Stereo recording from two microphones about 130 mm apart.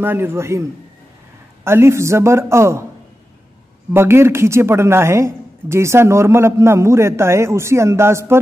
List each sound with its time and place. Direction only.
0.0 s a woman's voice: 15° right (ahead or behind)
3.9 s a woman's voice: 20° right (ahead or behind)